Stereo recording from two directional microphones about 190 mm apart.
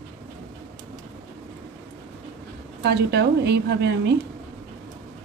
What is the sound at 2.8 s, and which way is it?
A woman's voice, 60° right (ahead or behind).